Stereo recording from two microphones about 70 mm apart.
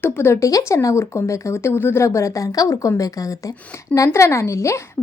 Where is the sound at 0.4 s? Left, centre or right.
Left.